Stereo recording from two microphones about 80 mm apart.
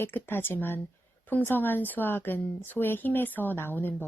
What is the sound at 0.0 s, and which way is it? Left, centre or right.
Speech, left.